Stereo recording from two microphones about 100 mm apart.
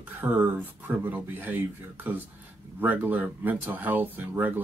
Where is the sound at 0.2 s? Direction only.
20° right (ahead or behind).